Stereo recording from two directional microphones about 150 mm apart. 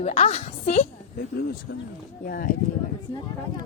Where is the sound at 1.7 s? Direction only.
90° left.